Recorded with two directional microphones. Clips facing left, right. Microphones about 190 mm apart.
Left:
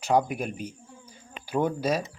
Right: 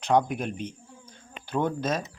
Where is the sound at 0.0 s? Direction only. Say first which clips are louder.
Right 1 dB; 5° left (ahead or behind).